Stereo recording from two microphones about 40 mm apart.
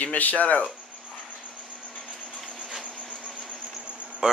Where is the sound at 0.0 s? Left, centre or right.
Left.